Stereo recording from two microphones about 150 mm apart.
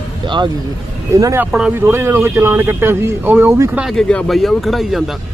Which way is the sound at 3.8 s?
5° left (ahead or behind).